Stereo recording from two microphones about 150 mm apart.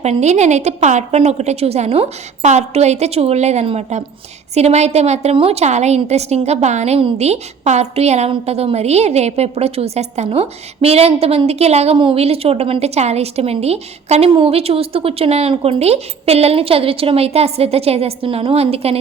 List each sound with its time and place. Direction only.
0.0 s a woman's voice: 50° right (ahead or behind)